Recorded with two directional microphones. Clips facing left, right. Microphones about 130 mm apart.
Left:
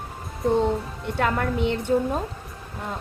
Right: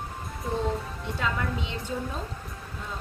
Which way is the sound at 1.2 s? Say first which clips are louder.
Left 7 dB; 60° left (ahead or behind).